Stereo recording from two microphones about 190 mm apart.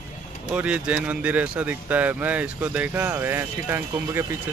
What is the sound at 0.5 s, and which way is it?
Speech, 5° right (ahead or behind).